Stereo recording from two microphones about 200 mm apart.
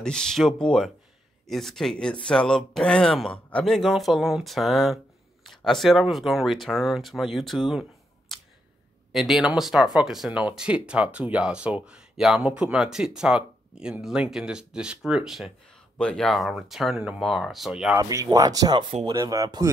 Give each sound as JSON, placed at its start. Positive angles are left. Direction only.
{"t": 0.0, "sound": "speech", "side_deg": 5}
{"t": 8.3, "sound": "a sound", "side_deg": 0}
{"t": 9.1, "sound": "speech", "side_deg": 0}
{"t": 17.9, "sound": "speech", "side_deg": -15}